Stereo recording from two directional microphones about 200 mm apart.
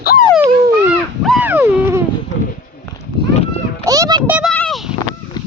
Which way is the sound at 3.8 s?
15° right (ahead or behind).